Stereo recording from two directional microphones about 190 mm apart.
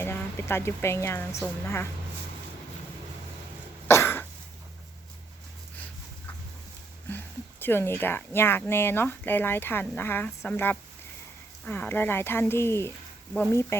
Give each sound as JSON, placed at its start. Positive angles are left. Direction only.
{"t": 0.0, "sound": "a woman's voice", "side_deg": 15}
{"t": 3.8, "sound": "cough", "side_deg": 15}
{"t": 7.1, "sound": "speech", "side_deg": 10}